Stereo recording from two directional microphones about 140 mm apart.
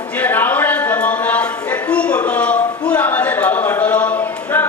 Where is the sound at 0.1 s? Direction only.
10° left (ahead or behind).